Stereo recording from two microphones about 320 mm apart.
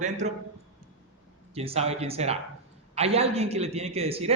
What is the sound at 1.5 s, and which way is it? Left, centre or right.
A man's voice, centre.